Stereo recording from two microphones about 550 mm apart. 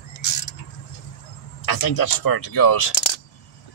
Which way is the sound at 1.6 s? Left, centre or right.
Left.